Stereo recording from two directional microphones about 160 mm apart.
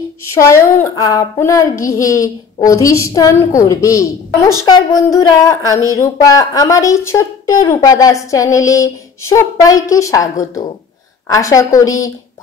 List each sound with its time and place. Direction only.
0.3 s speech: 20° left (ahead or behind)